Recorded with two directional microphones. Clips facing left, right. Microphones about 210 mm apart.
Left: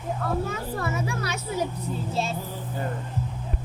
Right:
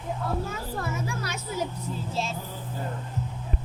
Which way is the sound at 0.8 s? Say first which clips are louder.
Left 2 dB; 70° left (ahead or behind).